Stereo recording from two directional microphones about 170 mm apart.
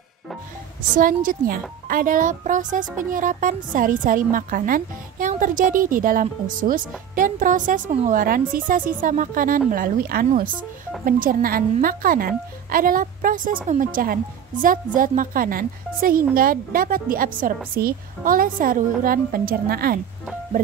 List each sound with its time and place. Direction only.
0.9 s a woman's voice: 55° right (ahead or behind)